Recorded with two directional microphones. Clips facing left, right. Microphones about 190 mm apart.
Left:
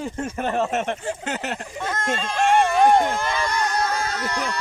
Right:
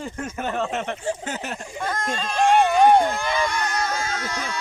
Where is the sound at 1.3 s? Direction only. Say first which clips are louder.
Left 2 dB; 70° left (ahead or behind).